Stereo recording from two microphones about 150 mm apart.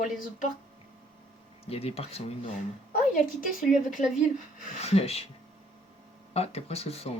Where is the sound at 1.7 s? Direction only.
40° left (ahead or behind).